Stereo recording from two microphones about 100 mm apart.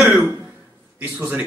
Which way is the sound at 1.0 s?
20° right (ahead or behind).